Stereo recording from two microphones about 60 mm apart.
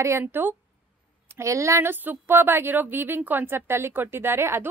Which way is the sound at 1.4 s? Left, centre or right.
Right.